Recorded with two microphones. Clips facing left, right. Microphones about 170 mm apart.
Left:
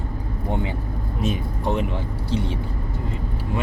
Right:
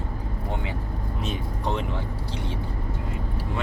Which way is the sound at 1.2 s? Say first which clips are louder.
Left 6 dB; 10° left (ahead or behind).